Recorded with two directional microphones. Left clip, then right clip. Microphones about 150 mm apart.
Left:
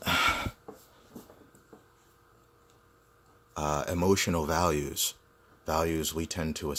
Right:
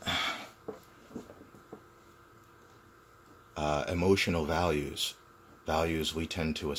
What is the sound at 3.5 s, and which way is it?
Speech, 40° left (ahead or behind).